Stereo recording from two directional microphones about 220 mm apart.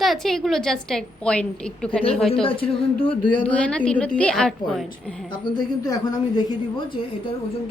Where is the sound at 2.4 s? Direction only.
25° left (ahead or behind).